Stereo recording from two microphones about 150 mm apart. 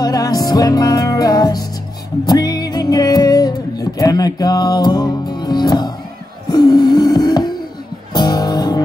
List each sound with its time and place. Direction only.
0.0 s music: 25° left (ahead or behind)
6.5 s a sound: 30° left (ahead or behind)
8.1 s music: 25° left (ahead or behind)